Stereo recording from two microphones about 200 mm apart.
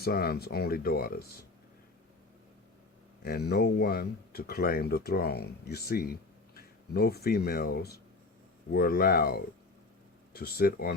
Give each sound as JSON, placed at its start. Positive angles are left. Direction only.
{"t": 0.0, "sound": "speech", "side_deg": 50}
{"t": 3.2, "sound": "speech", "side_deg": 50}